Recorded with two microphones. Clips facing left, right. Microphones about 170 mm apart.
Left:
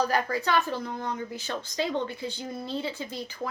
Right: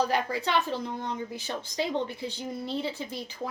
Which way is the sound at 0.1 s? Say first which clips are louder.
Left 1 dB; 20° right (ahead or behind).